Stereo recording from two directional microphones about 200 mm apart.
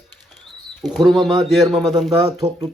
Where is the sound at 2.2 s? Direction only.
20° right (ahead or behind).